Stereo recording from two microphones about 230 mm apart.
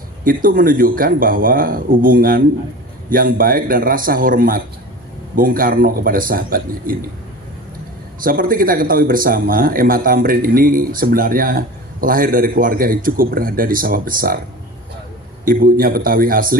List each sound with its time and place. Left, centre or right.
0.3 s a man's voice: right
8.2 s a man's voice: right
15.4 s a man's voice: right